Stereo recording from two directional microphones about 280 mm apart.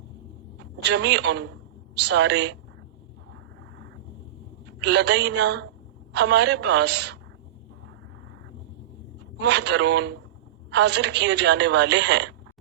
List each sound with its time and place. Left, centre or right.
0.6 s a man's voice: right
4.8 s a woman's voice: right
9.4 s a woman's voice: right